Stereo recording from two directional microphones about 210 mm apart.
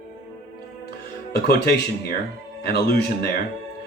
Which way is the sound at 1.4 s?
45° left (ahead or behind).